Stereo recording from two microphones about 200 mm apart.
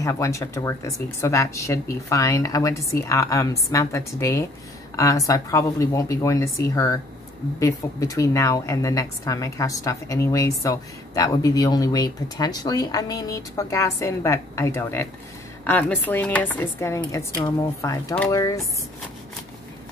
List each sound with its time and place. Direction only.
0.0 s a woman's voice: 15° left (ahead or behind)